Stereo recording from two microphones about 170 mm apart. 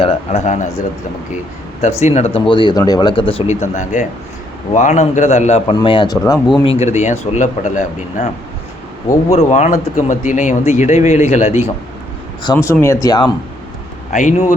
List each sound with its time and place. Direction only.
0.0 s speech: 45° left (ahead or behind)
1.8 s speech: 40° left (ahead or behind)
5.7 s speech: 30° left (ahead or behind)
6.1 s speech: 20° left (ahead or behind)
6.7 s speech: 40° left (ahead or behind)
9.3 s speech: 45° left (ahead or behind)
12.4 s speech: 25° left (ahead or behind)
14.1 s speech: 45° left (ahead or behind)